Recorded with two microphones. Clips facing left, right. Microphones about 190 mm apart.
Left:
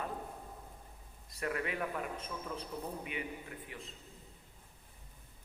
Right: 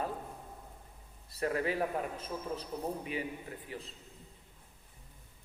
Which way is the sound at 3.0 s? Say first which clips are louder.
Right 4 dB; 35° right (ahead or behind).